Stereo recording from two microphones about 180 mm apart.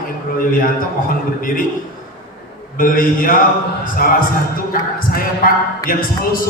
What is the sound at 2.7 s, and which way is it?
Speech, 50° left (ahead or behind).